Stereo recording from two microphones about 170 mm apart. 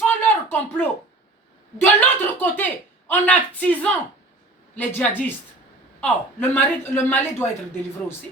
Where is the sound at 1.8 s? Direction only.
10° left (ahead or behind).